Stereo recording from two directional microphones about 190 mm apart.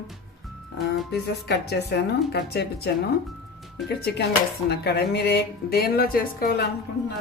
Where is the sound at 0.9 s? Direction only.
60° left (ahead or behind).